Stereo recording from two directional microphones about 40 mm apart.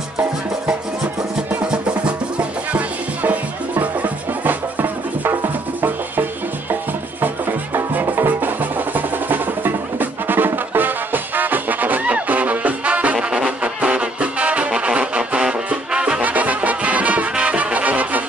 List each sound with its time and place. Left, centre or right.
1.7 s music: right
3.2 s music: right
6.7 s music: right
13.3 s brass instrument: right
13.7 s music: right
16.2 s music: right